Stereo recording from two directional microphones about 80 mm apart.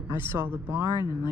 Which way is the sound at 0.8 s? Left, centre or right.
Left.